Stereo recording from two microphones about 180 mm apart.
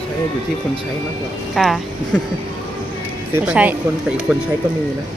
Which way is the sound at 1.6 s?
Centre (ahead or behind).